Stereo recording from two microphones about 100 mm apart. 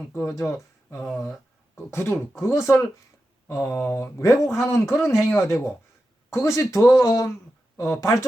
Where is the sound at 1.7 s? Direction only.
25° left (ahead or behind).